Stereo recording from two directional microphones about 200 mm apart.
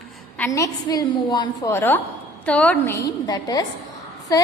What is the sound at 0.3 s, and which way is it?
A woman's voice, 15° left (ahead or behind).